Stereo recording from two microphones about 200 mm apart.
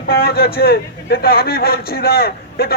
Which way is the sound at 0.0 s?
50° left (ahead or behind).